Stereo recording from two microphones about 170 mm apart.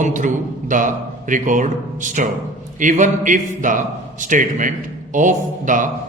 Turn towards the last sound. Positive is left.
turn(degrees=-50)  # may be behind; listen again after turning